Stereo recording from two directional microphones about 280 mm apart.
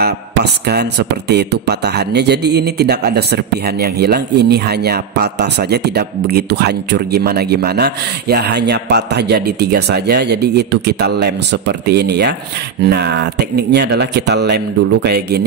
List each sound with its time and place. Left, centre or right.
0.0 s a man's voice: right